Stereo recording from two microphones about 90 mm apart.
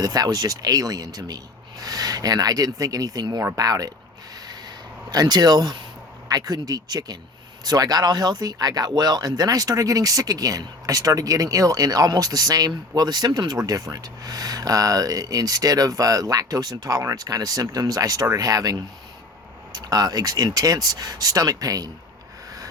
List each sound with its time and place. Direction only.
0.0 s speech: 45° right (ahead or behind)
5.1 s speech: 45° right (ahead or behind)